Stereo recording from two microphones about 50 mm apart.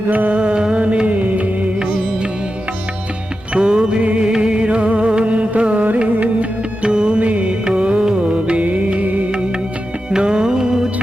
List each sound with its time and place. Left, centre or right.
0.1 s music: right
3.5 s music: centre
10.1 s music: centre